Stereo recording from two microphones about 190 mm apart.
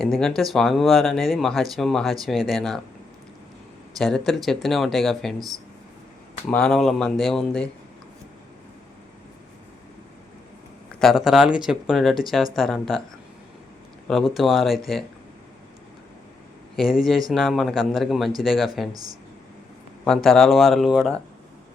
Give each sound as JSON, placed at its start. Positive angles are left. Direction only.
{"t": 0.0, "sound": "speech", "side_deg": 5}
{"t": 3.9, "sound": "speech", "side_deg": 0}
{"t": 6.5, "sound": "speech", "side_deg": 5}
{"t": 11.0, "sound": "speech", "side_deg": 0}
{"t": 14.1, "sound": "speech", "side_deg": 0}
{"t": 16.7, "sound": "speech", "side_deg": 0}
{"t": 20.1, "sound": "speech", "side_deg": 0}